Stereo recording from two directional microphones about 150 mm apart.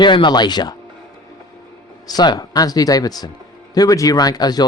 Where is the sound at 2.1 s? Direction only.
25° left (ahead or behind).